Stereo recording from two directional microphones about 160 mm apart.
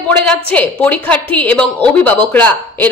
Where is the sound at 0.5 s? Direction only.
10° left (ahead or behind).